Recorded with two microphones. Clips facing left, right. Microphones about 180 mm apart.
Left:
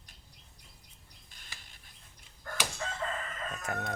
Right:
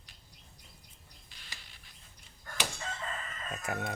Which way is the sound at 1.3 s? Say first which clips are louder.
Right 1 dB; 50° left (ahead or behind).